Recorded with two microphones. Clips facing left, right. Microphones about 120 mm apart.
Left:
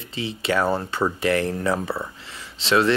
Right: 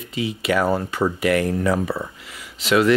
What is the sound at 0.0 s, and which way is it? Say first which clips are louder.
Speech: right 3 dB; 30° left (ahead or behind).